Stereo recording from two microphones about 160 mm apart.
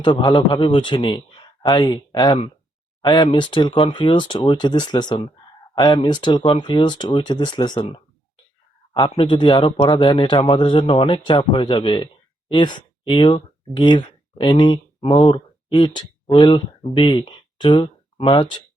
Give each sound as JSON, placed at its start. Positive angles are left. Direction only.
{"t": 0.0, "sound": "a man's voice", "side_deg": 30}